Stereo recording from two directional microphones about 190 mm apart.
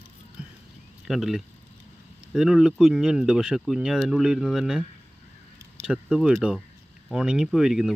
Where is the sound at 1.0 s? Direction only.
Centre (ahead or behind).